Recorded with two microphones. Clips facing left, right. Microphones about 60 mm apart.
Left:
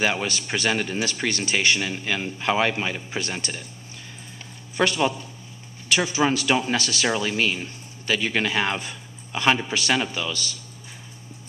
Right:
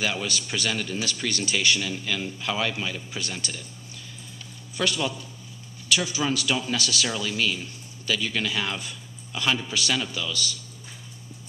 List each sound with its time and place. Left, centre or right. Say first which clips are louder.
0.0 s a man's voice: left 4 dB; left
4.7 s a man's voice: left 5 dB; left